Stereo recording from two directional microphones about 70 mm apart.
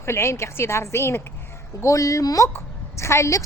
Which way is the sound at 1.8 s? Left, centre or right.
Left.